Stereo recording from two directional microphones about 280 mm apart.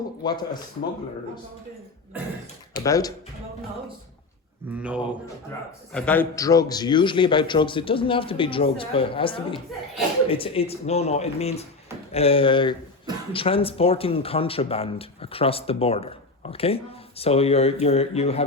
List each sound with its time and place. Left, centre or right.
0.3 s a man's voice: centre
2.7 s a man's voice: centre
4.7 s a man's voice: centre; by 18.4 s left